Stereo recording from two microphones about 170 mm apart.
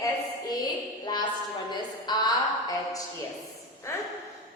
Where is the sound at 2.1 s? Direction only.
25° left (ahead or behind).